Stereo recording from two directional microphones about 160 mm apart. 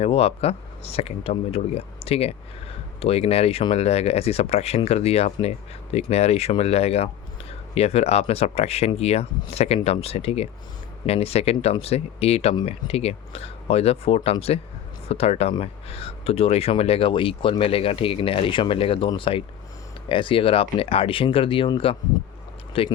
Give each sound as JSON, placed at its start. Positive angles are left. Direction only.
{"t": 0.0, "sound": "speech", "side_deg": 40}